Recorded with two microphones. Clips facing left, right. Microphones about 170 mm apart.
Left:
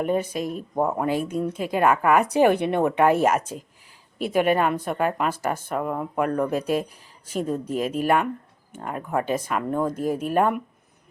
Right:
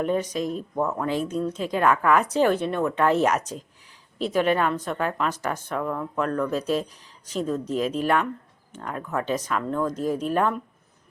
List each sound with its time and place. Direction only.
0.0 s speech: 10° left (ahead or behind)
0.8 s speech: 30° left (ahead or behind)
1.0 s speech: 10° left (ahead or behind)